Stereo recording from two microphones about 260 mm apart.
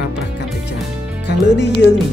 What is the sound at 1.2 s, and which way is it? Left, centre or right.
Speech, left.